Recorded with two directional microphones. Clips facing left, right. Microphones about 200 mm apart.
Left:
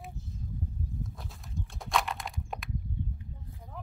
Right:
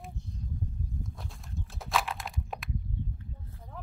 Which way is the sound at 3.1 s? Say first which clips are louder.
Even; 15° left (ahead or behind).